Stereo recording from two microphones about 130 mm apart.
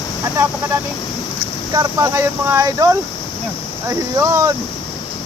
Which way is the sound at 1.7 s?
25° right (ahead or behind).